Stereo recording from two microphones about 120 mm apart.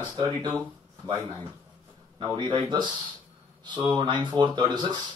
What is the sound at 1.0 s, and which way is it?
Speech, 40° right (ahead or behind).